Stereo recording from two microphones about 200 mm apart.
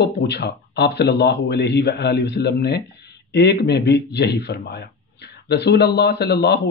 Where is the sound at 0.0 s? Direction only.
55° left (ahead or behind).